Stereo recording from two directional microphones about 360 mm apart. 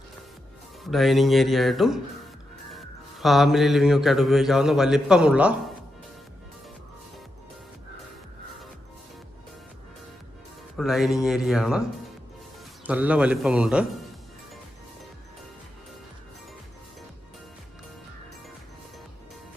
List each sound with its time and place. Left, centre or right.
0.9 s speech: centre
2.6 s music: centre
10.8 s speech: centre
12.9 s speech: centre